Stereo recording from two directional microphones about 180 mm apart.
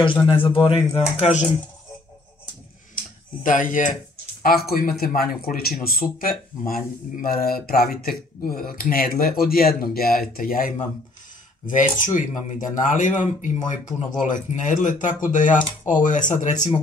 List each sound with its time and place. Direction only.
0.0 s a man's voice: 25° left (ahead or behind)
1.1 s speech: 40° left (ahead or behind)
3.0 s a sound: 50° left (ahead or behind)
4.6 s speech: 55° left (ahead or behind)